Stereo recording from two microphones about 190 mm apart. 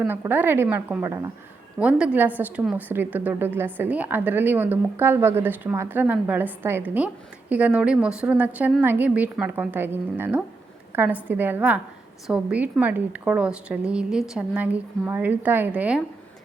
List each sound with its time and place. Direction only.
0.0 s a woman's voice: 10° right (ahead or behind)